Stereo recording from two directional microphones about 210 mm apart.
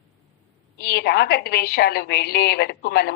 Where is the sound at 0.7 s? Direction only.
50° left (ahead or behind).